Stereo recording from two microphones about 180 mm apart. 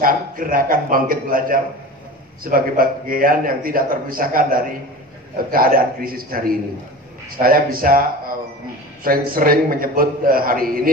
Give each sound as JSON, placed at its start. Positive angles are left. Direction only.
{"t": 0.0, "sound": "a man's voice", "side_deg": -50}